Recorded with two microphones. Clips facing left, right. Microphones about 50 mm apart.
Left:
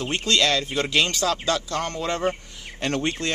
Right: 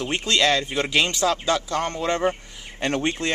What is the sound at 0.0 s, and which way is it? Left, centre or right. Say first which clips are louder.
Speech: right 1 dB; centre.